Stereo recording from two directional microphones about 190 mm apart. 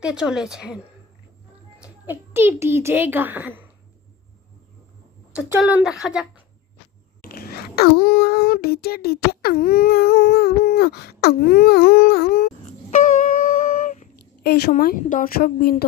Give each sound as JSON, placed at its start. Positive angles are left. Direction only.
{"t": 0.0, "sound": "speech", "side_deg": -5}
{"t": 1.8, "sound": "a child's voice", "side_deg": -10}
{"t": 5.3, "sound": "speech", "side_deg": -5}
{"t": 7.2, "sound": "a sound", "side_deg": 50}
{"t": 12.9, "sound": "music", "side_deg": 40}
{"t": 14.4, "sound": "a woman's voice", "side_deg": 55}